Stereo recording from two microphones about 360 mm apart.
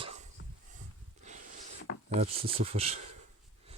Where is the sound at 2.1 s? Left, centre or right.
Centre.